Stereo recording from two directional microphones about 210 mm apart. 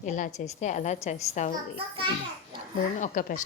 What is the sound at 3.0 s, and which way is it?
Speech, 40° left (ahead or behind).